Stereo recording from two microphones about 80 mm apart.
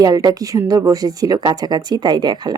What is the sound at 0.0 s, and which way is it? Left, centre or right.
A woman's voice, right.